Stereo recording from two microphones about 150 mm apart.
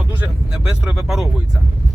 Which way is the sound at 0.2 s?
5° right (ahead or behind).